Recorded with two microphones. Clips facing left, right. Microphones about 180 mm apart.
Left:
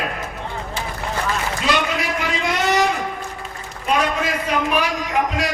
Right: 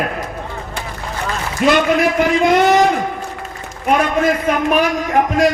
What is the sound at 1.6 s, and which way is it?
Speech, 55° right (ahead or behind).